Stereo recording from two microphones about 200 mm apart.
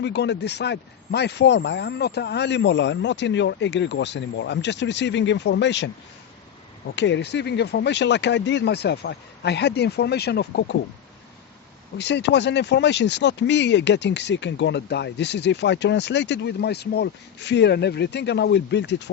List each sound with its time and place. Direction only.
0.0 s speech: 55° left (ahead or behind)
6.9 s speech: 60° left (ahead or behind)
11.9 s speech: 60° left (ahead or behind)